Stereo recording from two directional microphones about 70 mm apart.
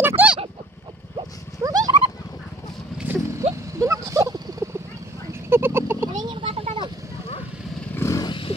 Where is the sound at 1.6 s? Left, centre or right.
Right.